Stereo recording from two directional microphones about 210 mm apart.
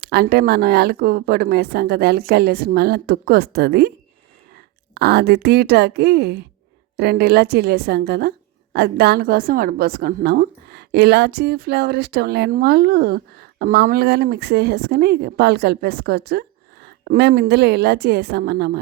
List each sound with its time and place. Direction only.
0.0 s a woman's voice: 50° right (ahead or behind)